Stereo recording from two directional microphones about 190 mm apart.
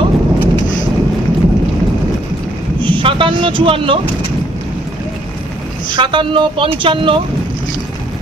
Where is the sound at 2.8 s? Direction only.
25° right (ahead or behind).